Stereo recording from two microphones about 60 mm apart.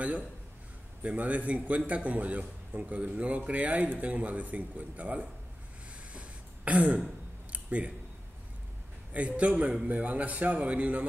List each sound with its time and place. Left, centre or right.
1.0 s a man's voice: right
6.1 s throat clearing: right
7.5 s a sound: right
9.4 s a man's voice: right